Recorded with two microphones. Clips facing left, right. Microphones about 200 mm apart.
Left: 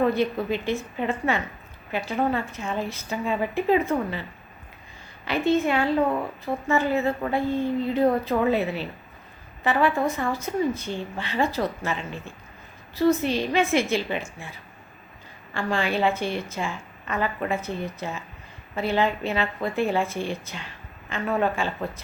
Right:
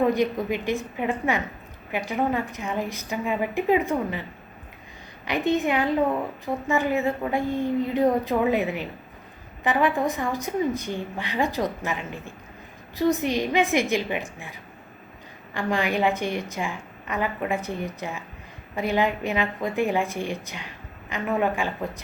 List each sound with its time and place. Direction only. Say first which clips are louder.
0.0 s a woman's voice: right 1 dB; 15° right (ahead or behind)
5.2 s a woman's voice: left 1 dB; 15° right (ahead or behind)